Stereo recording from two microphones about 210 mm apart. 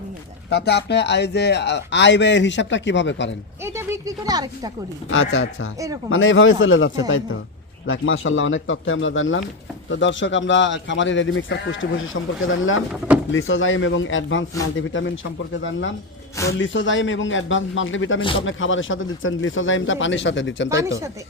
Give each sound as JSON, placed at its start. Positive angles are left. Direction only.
{"t": 0.5, "sound": "speech", "side_deg": 55}
{"t": 3.6, "sound": "speech", "side_deg": -15}
{"t": 5.1, "sound": "speech", "side_deg": 60}
{"t": 16.5, "sound": "speech", "side_deg": 60}
{"t": 18.2, "sound": "a man's voice", "side_deg": 25}
{"t": 18.4, "sound": "speech", "side_deg": 65}
{"t": 20.7, "sound": "speech", "side_deg": -15}